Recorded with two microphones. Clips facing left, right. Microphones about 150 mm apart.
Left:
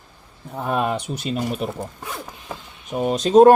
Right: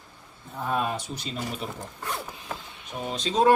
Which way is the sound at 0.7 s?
65° left (ahead or behind).